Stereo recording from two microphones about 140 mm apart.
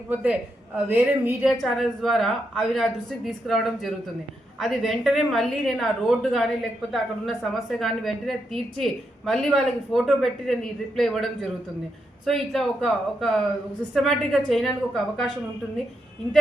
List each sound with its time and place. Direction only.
0.1 s a woman's voice: 10° right (ahead or behind)
1.6 s a woman's voice: centre (ahead or behind)